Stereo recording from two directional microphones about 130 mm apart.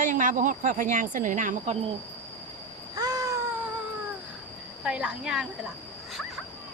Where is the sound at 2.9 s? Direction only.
30° right (ahead or behind).